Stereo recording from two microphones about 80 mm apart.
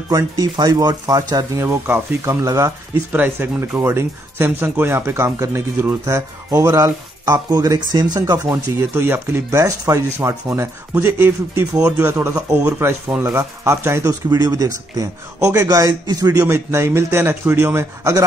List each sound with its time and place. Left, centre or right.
0.1 s a man's voice: right
3.1 s speech: right
6.0 s a man's voice: right
7.5 s a man's voice: right
8.9 s speech: right
12.3 s a man's voice: right
12.5 s speech: right
13.2 s speech: right
14.0 s a man's voice: right